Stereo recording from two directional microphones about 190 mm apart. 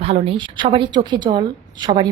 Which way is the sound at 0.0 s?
30° right (ahead or behind).